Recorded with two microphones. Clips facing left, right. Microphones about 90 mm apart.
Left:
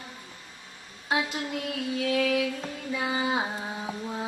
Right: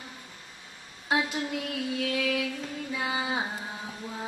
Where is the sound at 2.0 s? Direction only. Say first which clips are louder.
Left 5 dB; centre (ahead or behind).